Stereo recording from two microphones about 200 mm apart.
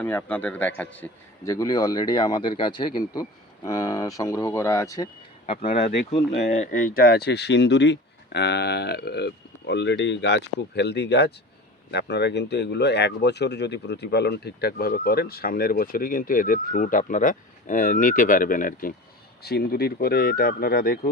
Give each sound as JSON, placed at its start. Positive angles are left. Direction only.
{"t": 0.0, "sound": "a man's voice", "side_deg": 10}
{"t": 6.4, "sound": "speech", "side_deg": 40}